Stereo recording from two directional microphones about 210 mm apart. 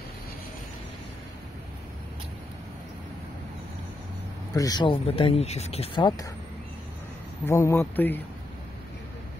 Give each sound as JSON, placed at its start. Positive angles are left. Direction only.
{"t": 4.6, "sound": "speech", "side_deg": 20}
{"t": 7.4, "sound": "a man's voice", "side_deg": 15}